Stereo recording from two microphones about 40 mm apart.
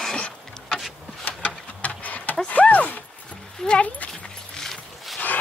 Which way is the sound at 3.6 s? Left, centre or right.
Left.